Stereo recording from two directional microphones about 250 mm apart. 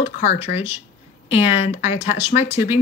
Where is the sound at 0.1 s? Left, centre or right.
Left.